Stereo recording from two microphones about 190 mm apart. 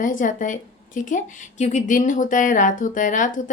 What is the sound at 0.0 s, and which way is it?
A woman's voice, 45° left (ahead or behind).